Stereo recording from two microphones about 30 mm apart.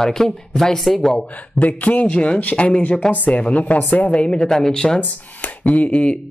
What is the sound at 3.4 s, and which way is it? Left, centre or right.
Speech, left.